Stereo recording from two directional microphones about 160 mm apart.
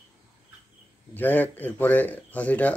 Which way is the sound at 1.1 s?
10° left (ahead or behind).